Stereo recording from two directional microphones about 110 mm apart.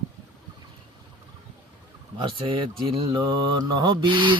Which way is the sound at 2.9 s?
40° right (ahead or behind).